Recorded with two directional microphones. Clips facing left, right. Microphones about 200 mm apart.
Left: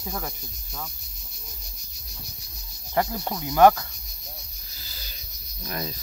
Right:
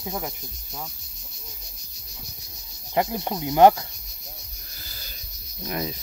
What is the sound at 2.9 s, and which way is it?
Cricket, 20° right (ahead or behind).